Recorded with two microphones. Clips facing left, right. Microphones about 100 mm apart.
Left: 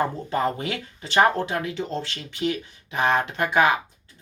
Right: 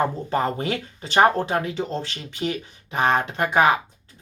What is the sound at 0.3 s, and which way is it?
Speech, 35° right (ahead or behind).